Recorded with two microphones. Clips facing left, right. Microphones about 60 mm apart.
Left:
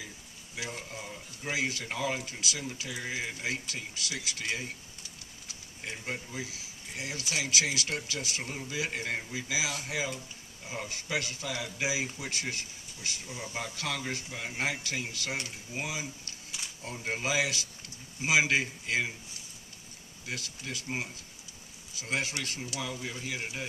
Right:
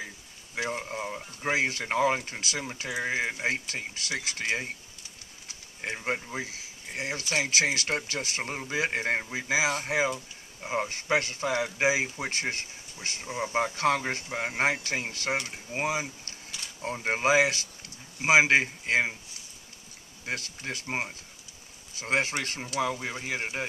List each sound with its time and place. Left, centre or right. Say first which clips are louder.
0.6 s speech: right 8 dB; right
5.8 s speech: right 6 dB; right
20.2 s speech: right 5 dB; right